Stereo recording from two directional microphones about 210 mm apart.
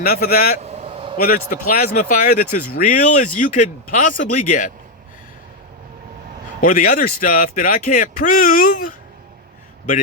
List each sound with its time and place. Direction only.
0.0 s speech: 45° left (ahead or behind)
0.6 s a sound: 30° right (ahead or behind)
1.2 s speech: 40° left (ahead or behind)
6.6 s speech: 40° left (ahead or behind)